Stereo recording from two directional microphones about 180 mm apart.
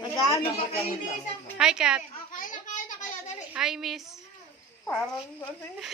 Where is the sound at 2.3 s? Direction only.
50° left (ahead or behind).